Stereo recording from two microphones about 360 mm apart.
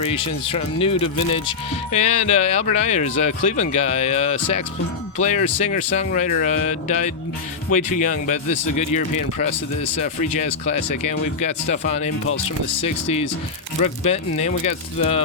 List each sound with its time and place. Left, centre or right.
0.0 s speech: centre
10.0 s speech: centre
13.8 s speech: centre